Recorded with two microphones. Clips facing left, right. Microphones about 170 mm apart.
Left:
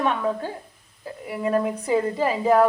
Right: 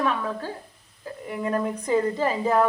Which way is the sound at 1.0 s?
10° left (ahead or behind).